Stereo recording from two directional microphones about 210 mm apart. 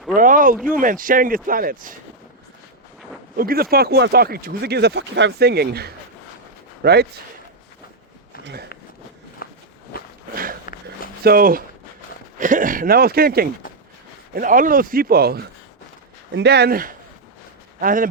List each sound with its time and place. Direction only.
0.2 s a sound: 40° right (ahead or behind)
0.5 s speech: 5° right (ahead or behind)
0.8 s speech: 40° right (ahead or behind)
3.3 s speech: 45° right (ahead or behind)
9.4 s walk: 45° left (ahead or behind)
10.7 s a sound: 40° left (ahead or behind)
11.2 s speech: 45° right (ahead or behind)